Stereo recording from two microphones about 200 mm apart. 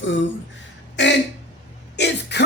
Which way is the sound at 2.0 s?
60° left (ahead or behind).